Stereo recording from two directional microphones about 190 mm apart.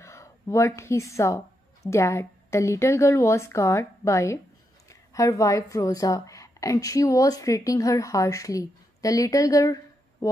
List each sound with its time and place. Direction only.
0.0 s a woman's voice: 15° left (ahead or behind)
10.2 s music: 20° left (ahead or behind)